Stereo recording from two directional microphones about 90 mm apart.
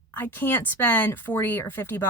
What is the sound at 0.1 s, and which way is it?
A woman's voice, 20° left (ahead or behind).